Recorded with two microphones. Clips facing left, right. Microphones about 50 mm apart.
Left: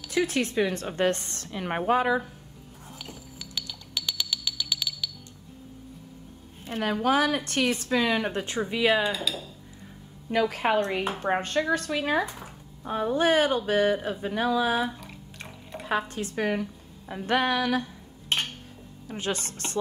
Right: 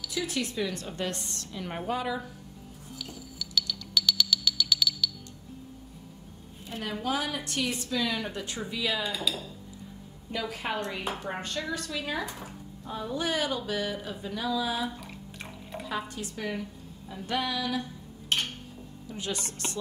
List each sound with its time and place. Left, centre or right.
0.0 s a woman's voice: left
3.0 s music: left
6.7 s a woman's voice: left
9.2 s speech: centre
10.5 s a woman's voice: left
15.0 s drip: centre
15.9 s a woman's voice: left
19.0 s a woman's voice: left